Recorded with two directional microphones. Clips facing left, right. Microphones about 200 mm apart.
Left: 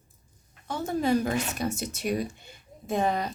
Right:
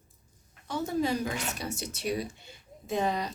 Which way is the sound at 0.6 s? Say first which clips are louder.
Left 2 dB; 55° left (ahead or behind).